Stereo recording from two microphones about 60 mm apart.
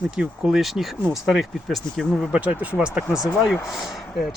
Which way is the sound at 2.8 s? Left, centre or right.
Centre.